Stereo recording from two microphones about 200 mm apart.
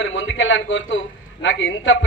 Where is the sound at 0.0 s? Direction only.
70° left (ahead or behind).